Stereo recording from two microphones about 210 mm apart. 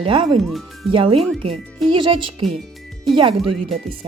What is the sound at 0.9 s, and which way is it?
Speech, 25° right (ahead or behind).